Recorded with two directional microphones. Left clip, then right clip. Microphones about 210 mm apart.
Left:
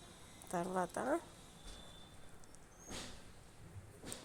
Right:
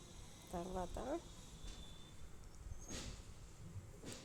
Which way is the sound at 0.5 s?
15° left (ahead or behind).